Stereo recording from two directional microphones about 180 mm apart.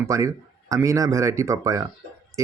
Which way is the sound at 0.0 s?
15° right (ahead or behind).